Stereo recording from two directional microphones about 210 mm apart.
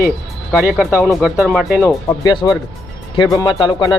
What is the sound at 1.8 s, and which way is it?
Speech, 20° left (ahead or behind).